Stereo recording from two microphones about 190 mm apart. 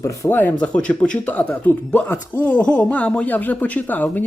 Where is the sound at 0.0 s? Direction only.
15° left (ahead or behind).